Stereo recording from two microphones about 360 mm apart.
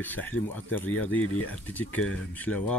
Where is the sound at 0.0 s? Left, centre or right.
Centre.